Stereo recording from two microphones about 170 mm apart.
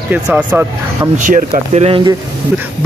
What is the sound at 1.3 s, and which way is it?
Speech, 45° right (ahead or behind).